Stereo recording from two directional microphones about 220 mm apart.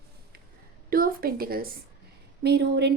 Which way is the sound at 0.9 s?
40° right (ahead or behind).